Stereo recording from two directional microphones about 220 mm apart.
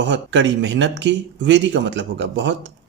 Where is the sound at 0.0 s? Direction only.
55° right (ahead or behind).